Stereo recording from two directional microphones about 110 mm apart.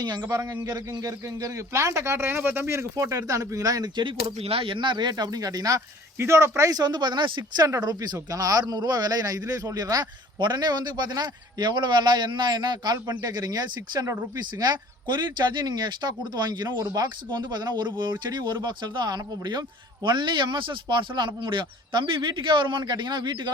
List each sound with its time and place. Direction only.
0.0 s speech: 40° right (ahead or behind)
4.4 s speech: 60° right (ahead or behind); by 23.5 s 40° right (ahead or behind)